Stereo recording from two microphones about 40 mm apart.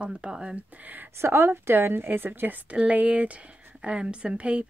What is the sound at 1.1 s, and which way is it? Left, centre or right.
A woman's voice, right.